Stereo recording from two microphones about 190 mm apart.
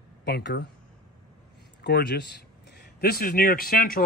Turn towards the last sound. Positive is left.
turn(degrees=50)  # may be behind; listen again after turning